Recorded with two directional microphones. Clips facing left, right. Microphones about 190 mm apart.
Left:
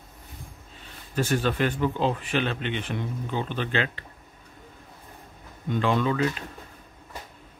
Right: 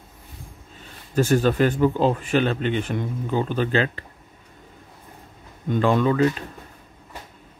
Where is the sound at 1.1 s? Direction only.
40° right (ahead or behind).